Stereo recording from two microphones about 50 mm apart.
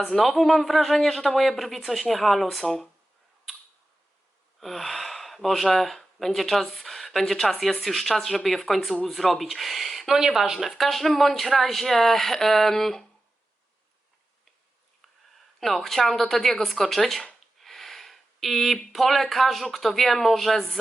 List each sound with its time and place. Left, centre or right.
0.1 s speech: centre
4.6 s speech: centre
15.6 s speech: centre